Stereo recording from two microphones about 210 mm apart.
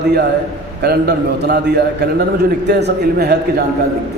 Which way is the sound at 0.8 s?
50° right (ahead or behind).